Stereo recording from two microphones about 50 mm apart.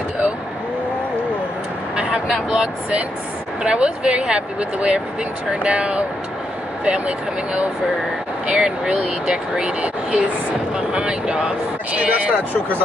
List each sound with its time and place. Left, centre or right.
2.0 s vehicle: right
2.2 s speech: centre